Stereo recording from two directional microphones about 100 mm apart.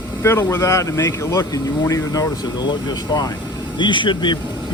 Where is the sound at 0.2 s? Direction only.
25° left (ahead or behind).